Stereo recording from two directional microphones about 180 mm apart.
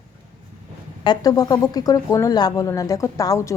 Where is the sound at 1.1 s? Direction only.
20° left (ahead or behind).